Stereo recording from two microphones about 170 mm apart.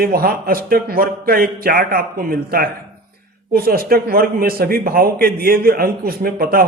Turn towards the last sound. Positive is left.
turn(degrees=-60)  # may be behind; listen again after turning